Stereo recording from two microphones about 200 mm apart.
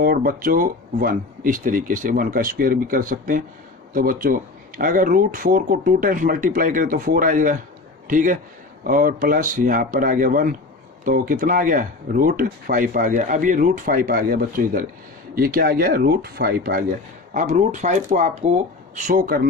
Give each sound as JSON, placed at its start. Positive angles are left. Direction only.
{"t": 0.0, "sound": "a man's voice", "side_deg": -45}
{"t": 17.3, "sound": "speech", "side_deg": -40}